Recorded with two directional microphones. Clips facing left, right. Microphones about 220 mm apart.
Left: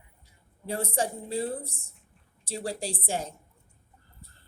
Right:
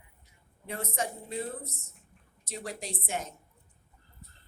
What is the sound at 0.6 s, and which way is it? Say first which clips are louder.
A woman's voice: left 5 dB; 30° left (ahead or behind).